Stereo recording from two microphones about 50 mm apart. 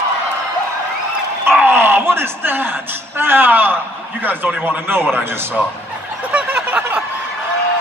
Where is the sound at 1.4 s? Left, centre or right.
Right.